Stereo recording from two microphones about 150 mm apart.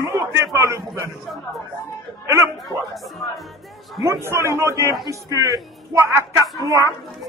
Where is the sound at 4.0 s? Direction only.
20° right (ahead or behind).